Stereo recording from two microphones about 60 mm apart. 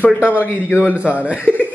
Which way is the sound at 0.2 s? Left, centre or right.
Right.